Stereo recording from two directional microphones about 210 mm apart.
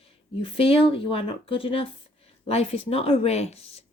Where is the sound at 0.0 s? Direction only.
25° left (ahead or behind).